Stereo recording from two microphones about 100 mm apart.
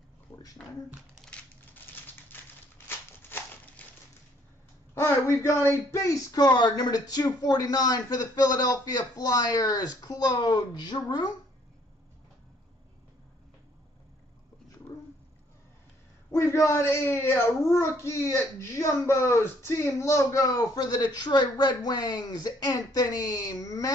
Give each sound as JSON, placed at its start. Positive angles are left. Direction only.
{"t": 0.6, "sound": "speech", "side_deg": 5}
{"t": 2.3, "sound": "a sound", "side_deg": 20}
{"t": 4.9, "sound": "speech", "side_deg": 30}
{"t": 16.3, "sound": "speech", "side_deg": 30}